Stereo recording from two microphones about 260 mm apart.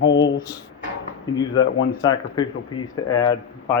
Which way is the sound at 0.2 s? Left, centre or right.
Centre.